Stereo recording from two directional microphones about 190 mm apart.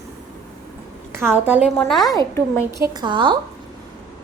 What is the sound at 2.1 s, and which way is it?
Speech, 10° left (ahead or behind).